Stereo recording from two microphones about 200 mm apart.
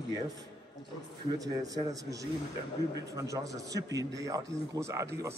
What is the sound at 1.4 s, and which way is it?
A man's voice, 15° right (ahead or behind).